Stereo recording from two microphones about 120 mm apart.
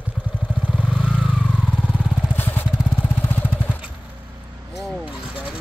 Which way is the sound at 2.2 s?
15° left (ahead or behind).